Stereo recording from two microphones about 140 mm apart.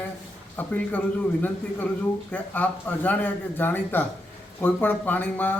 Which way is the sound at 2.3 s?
15° left (ahead or behind).